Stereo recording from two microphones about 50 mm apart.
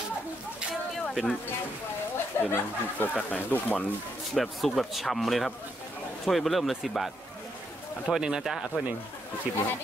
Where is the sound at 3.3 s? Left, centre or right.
Left.